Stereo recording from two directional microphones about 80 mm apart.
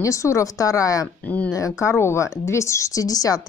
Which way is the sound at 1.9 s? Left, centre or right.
Left.